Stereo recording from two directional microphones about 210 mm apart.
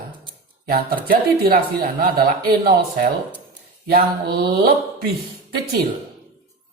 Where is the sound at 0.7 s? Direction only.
45° right (ahead or behind).